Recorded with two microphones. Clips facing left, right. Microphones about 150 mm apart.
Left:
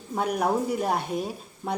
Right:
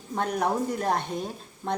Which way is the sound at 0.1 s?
10° left (ahead or behind).